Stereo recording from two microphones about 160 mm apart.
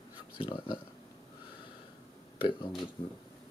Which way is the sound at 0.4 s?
30° left (ahead or behind).